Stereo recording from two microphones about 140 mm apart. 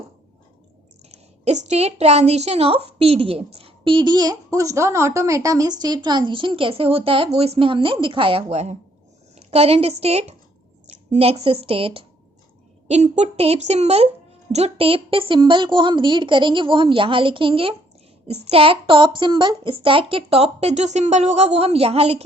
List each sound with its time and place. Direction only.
1.1 s a woman's voice: 50° right (ahead or behind)
12.9 s a child's voice: 50° right (ahead or behind)